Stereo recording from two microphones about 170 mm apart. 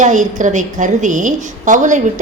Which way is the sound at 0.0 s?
45° right (ahead or behind).